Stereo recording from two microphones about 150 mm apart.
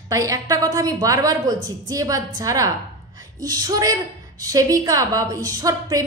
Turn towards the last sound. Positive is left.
turn(degrees=-25)  # may be behind; listen again after turning